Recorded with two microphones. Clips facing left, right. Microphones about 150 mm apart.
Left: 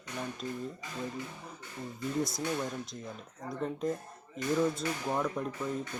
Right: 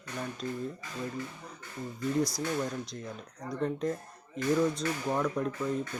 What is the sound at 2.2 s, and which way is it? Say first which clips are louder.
Speech: right 3 dB; 25° left (ahead or behind).